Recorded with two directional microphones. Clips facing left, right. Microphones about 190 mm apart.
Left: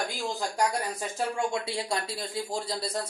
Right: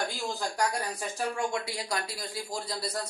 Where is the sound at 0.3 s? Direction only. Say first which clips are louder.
Left 2 dB; 20° left (ahead or behind).